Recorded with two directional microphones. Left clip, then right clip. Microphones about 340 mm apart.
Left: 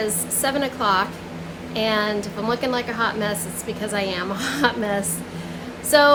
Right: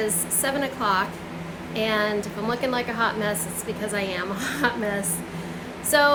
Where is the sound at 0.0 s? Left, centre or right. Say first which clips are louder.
Left 2 dB; centre.